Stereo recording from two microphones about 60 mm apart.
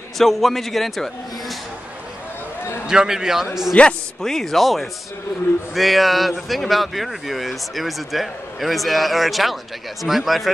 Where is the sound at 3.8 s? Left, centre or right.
Left.